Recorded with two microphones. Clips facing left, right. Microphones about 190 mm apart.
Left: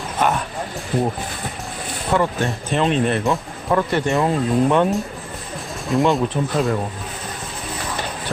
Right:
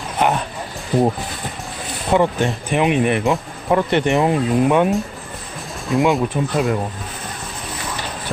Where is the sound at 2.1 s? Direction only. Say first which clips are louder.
Right 3 dB; 15° right (ahead or behind).